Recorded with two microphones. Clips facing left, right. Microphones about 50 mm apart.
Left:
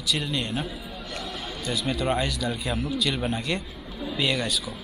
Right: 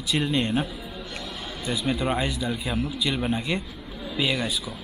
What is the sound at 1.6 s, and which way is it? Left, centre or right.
Speech, centre.